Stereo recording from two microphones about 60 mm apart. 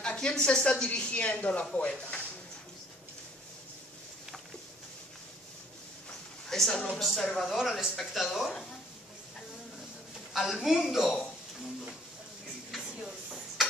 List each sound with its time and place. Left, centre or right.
0.0 s speech: centre
6.5 s a woman's voice: centre
10.3 s speech: centre